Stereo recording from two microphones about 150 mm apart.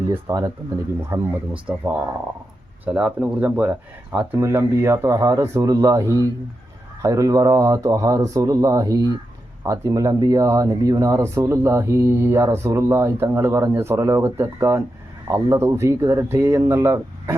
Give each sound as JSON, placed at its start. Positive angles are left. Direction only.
{"t": 0.1, "sound": "speech", "side_deg": -20}
{"t": 2.8, "sound": "speech", "side_deg": -10}